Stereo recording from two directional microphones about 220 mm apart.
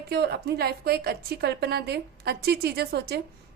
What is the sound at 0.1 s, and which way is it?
A woman's voice, 45° right (ahead or behind).